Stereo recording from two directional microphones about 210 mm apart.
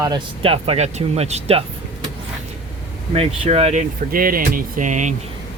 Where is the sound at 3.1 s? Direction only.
30° right (ahead or behind).